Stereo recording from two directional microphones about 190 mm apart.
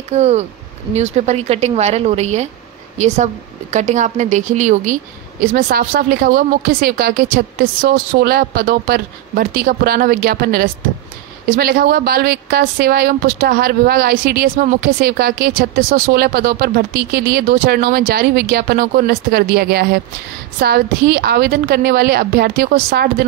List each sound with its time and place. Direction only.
0.1 s speech: 35° right (ahead or behind)
3.7 s a woman's voice: 40° right (ahead or behind); by 23.0 s 55° right (ahead or behind)